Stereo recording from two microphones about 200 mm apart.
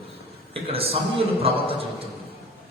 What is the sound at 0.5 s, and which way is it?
A man's voice, 30° right (ahead or behind).